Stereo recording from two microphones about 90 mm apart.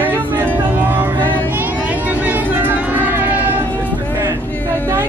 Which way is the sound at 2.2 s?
20° right (ahead or behind).